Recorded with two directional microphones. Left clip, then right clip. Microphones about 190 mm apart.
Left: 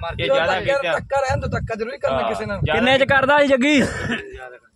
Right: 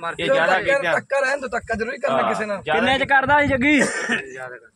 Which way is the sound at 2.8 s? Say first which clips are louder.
Left 3 dB; 60° left (ahead or behind).